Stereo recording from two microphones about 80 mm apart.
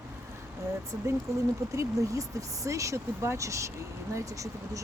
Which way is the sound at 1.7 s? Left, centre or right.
Right.